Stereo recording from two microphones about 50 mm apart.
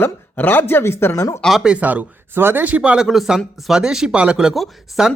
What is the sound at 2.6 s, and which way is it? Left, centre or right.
Speech, right.